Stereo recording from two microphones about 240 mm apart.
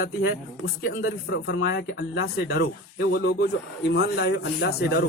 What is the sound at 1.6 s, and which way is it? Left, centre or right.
Speech, left.